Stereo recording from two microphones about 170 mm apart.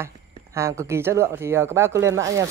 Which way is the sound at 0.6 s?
15° right (ahead or behind).